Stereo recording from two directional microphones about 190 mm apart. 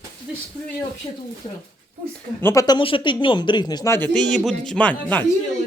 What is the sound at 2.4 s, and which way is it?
Speech, 15° left (ahead or behind).